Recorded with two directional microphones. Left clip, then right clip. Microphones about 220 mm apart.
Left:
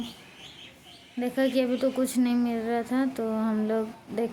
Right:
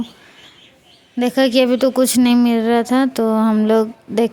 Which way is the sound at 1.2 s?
50° right (ahead or behind).